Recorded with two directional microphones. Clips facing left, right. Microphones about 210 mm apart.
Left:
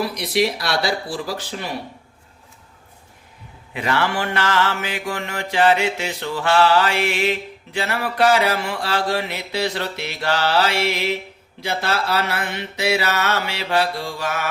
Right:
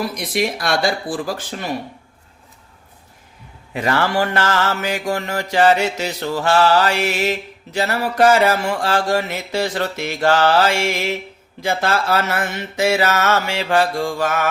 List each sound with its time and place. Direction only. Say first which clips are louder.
0.1 s mantra: left 1 dB; 50° right (ahead or behind)
3.8 s mantra: right 3 dB; 40° right (ahead or behind)